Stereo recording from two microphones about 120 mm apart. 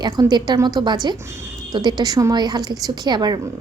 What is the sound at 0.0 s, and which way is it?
A woman's voice, 35° right (ahead or behind).